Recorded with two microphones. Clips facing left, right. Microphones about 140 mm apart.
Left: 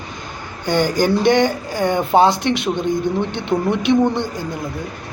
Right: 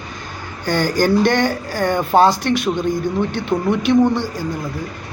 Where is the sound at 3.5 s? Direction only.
Centre (ahead or behind).